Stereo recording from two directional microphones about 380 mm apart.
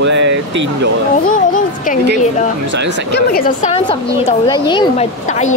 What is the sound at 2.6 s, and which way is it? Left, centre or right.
Speech, right.